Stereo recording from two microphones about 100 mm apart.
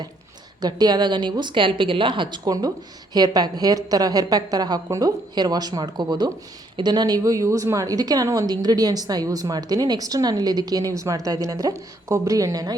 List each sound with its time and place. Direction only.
0.6 s a woman's voice: 45° right (ahead or behind)
2.4 s a woman's voice: 40° right (ahead or behind)